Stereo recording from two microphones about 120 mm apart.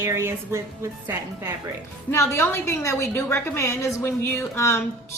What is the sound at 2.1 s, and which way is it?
A woman's voice, 20° left (ahead or behind).